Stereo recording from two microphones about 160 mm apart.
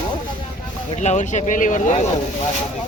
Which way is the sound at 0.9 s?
45° left (ahead or behind).